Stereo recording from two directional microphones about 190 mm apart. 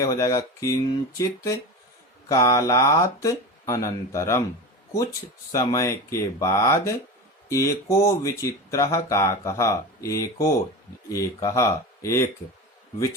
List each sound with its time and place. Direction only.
0.0 s speech: 15° left (ahead or behind)
5.5 s speech: 20° left (ahead or behind)